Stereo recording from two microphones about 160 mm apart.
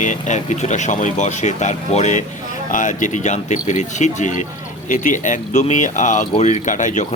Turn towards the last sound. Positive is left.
turn(degrees=50)  # may be behind; listen again after turning